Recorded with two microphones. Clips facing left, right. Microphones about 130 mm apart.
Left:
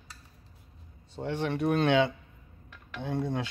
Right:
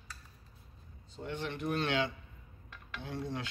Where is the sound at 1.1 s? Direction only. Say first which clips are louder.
Left 8 dB; 70° left (ahead or behind).